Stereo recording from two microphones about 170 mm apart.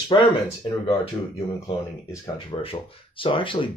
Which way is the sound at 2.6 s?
30° left (ahead or behind).